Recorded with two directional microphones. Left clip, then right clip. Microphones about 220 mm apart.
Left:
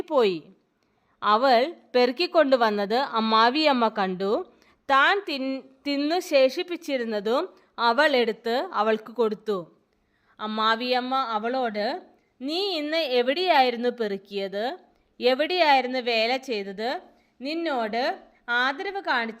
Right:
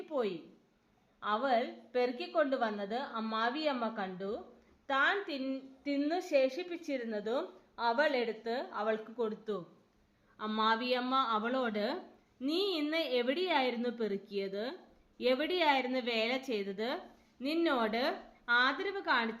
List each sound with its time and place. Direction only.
0.0 s a woman's voice: 50° left (ahead or behind)